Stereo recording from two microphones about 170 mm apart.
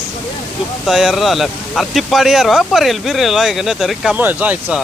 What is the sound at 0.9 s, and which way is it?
Speech, centre (ahead or behind).